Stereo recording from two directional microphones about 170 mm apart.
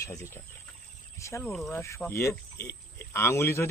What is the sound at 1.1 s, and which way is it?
Speech, 15° left (ahead or behind).